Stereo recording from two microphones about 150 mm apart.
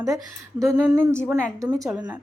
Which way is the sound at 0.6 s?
25° right (ahead or behind).